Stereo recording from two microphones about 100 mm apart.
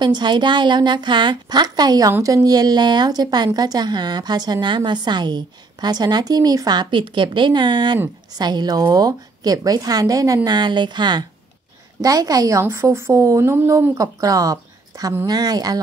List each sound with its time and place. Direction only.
0.0 s a woman's voice: 45° right (ahead or behind)
12.0 s a woman's voice: 40° right (ahead or behind)